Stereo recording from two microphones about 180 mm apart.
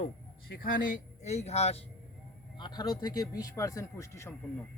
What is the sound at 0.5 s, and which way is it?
Speech, 50° left (ahead or behind).